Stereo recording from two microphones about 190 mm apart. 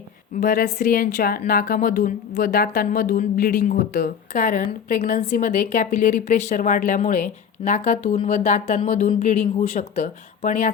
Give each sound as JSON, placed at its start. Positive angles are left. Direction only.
{"t": 0.3, "sound": "a woman's voice", "side_deg": 45}